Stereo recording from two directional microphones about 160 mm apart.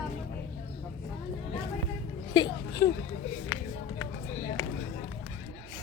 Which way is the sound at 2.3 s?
25° left (ahead or behind).